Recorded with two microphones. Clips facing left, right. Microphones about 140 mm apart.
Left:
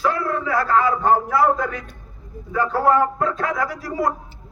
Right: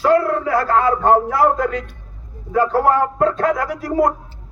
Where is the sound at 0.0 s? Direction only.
55° right (ahead or behind).